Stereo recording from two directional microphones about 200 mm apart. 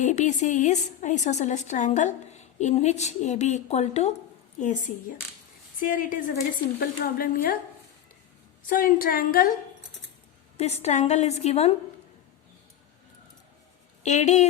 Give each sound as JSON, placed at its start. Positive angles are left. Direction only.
{"t": 0.0, "sound": "a woman's voice", "side_deg": 40}
{"t": 8.7, "sound": "a woman's voice", "side_deg": 45}
{"t": 10.6, "sound": "a woman's voice", "side_deg": 35}
{"t": 14.0, "sound": "a woman's voice", "side_deg": 35}